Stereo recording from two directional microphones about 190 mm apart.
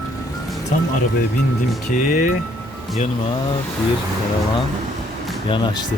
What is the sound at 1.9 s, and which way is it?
Speech, 45° left (ahead or behind).